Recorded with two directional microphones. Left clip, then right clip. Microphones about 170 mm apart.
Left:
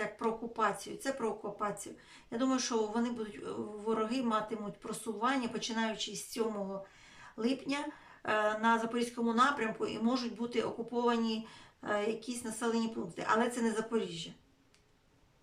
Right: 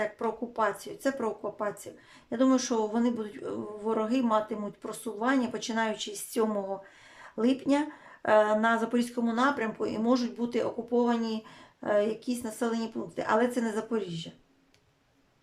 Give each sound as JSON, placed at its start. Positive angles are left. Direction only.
{"t": 0.0, "sound": "a man's voice", "side_deg": -40}